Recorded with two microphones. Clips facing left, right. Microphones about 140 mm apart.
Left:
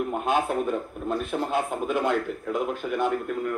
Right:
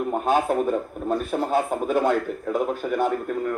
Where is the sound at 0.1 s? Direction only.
40° right (ahead or behind).